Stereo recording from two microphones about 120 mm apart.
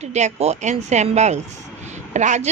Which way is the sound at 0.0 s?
75° right (ahead or behind).